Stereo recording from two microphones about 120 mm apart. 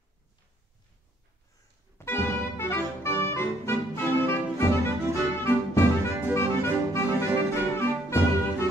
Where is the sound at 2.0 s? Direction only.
20° left (ahead or behind).